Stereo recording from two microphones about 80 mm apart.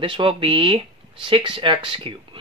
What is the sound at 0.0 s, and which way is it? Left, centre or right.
Speech, right.